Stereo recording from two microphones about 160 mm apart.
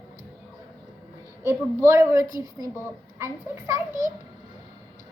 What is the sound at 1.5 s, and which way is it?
A woman's voice, 20° right (ahead or behind).